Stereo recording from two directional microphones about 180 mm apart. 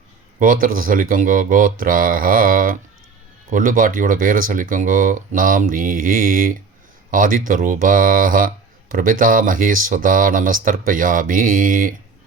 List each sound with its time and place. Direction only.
0.3 s speech: 50° right (ahead or behind)